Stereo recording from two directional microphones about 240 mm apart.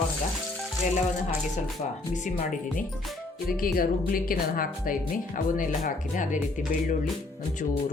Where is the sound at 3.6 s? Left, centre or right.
Left.